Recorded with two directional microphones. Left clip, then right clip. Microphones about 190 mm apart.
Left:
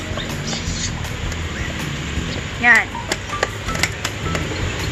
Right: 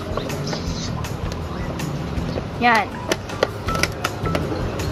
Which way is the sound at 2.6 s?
45° right (ahead or behind).